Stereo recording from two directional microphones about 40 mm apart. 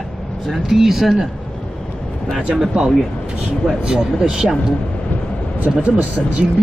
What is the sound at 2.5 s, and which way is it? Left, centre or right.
Speech, centre.